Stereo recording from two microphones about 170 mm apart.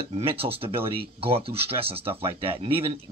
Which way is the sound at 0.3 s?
35° right (ahead or behind).